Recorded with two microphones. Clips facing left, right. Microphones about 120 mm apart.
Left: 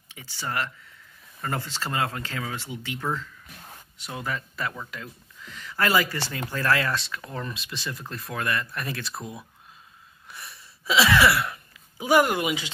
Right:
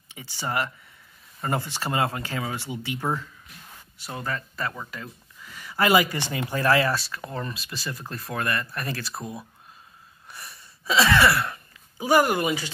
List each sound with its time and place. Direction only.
0.1 s speech: 15° right (ahead or behind)
4.0 s speech: 5° left (ahead or behind)
10.2 s a sound: centre (ahead or behind)